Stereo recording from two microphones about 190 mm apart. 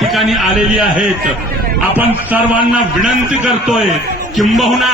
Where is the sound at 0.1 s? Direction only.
Centre (ahead or behind).